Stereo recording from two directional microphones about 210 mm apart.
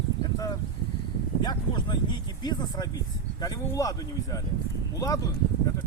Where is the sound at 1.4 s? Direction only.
20° left (ahead or behind).